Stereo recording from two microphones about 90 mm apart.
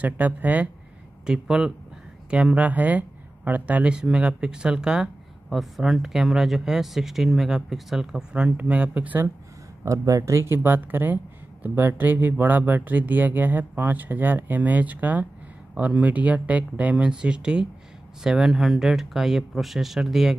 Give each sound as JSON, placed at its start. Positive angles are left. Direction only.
{"t": 0.0, "sound": "speech", "side_deg": -15}
{"t": 9.8, "sound": "speech", "side_deg": -35}